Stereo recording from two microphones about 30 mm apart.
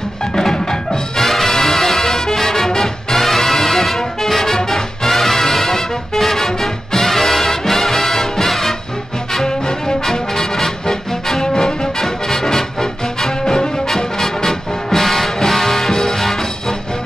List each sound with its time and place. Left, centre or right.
0.2 s music: centre
9.5 s music: left
11.4 s music: left
12.0 s music: centre